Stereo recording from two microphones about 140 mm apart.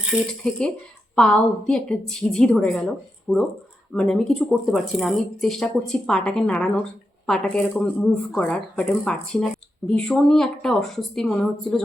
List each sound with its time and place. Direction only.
0.1 s speech: 15° left (ahead or behind)